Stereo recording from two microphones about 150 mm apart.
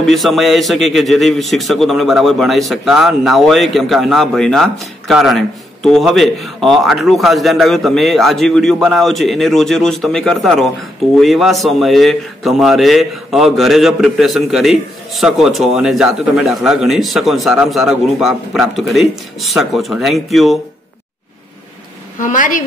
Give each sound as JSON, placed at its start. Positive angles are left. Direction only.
{"t": 0.0, "sound": "a man's voice", "side_deg": 0}
{"t": 22.2, "sound": "a woman's voice", "side_deg": 60}